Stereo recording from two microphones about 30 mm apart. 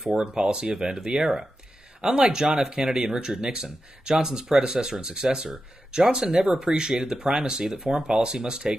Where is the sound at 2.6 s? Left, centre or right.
Centre.